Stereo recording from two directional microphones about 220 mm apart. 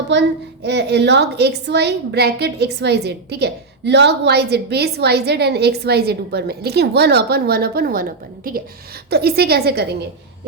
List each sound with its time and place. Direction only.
0.1 s a woman's voice: 50° right (ahead or behind)
9.0 s a woman's voice: 45° right (ahead or behind)